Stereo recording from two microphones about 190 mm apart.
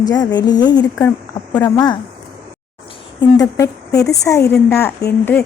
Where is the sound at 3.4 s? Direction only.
15° left (ahead or behind).